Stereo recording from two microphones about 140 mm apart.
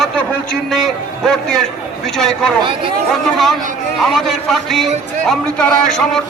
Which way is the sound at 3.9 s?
Centre (ahead or behind).